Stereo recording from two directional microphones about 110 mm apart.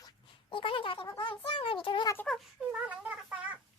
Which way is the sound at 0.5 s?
50° left (ahead or behind).